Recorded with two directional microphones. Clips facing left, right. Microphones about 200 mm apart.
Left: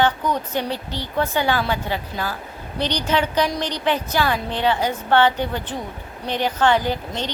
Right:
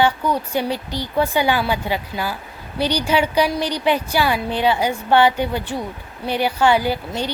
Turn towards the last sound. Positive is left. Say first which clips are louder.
# right 2 dB
turn(degrees=-10)  # may be behind; listen again after turning